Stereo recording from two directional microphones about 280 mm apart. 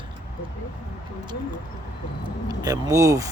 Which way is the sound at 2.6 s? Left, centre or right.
Centre.